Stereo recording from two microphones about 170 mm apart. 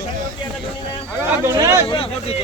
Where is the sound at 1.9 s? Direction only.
35° left (ahead or behind).